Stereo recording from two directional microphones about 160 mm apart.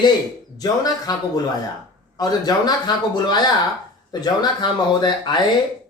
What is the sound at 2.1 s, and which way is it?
Speech, 25° left (ahead or behind).